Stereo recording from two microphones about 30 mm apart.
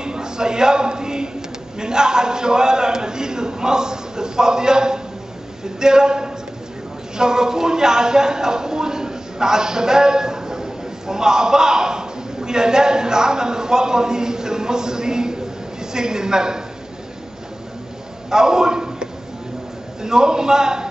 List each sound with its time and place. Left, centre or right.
0.0 s a man's voice: right
18.3 s a man's voice: right